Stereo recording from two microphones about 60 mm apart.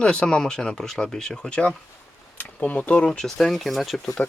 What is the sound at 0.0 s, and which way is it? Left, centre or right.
Speech, centre.